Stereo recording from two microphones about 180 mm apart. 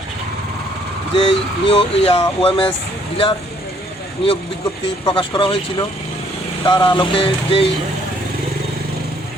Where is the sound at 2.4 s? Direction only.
30° left (ahead or behind).